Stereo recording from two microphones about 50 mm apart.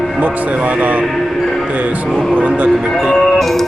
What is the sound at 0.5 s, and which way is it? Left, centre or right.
Speech, right.